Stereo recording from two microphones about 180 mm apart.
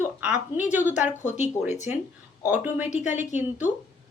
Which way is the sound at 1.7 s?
40° left (ahead or behind).